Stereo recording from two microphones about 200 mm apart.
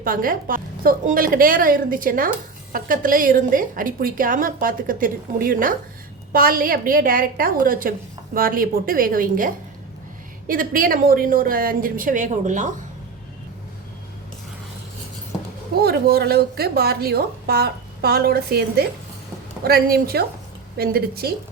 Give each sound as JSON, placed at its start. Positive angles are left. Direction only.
{"t": 0.0, "sound": "a woman's voice", "side_deg": -45}
{"t": 15.8, "sound": "a woman's voice", "side_deg": -50}